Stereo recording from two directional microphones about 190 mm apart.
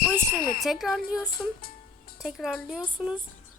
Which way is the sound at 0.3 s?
45° left (ahead or behind).